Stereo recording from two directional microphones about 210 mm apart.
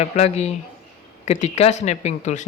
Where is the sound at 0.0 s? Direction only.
30° left (ahead or behind).